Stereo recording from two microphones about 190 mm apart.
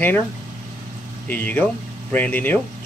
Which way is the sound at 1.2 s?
10° left (ahead or behind).